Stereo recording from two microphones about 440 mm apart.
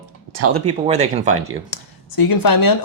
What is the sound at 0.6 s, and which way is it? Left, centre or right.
Speech, centre.